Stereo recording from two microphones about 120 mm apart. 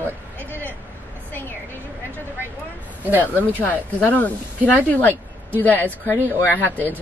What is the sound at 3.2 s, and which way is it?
Speech, 15° left (ahead or behind).